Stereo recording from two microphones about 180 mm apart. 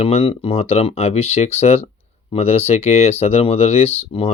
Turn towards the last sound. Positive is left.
turn(degrees=35)  # may be behind; listen again after turning